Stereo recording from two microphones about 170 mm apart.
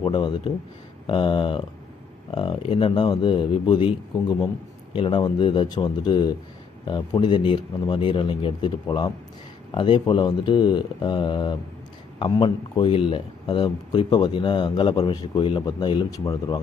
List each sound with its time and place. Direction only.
0.0 s speech: 30° left (ahead or behind)
4.9 s speech: 30° left (ahead or behind)